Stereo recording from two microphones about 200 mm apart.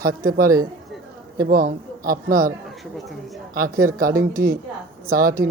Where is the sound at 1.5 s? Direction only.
45° right (ahead or behind).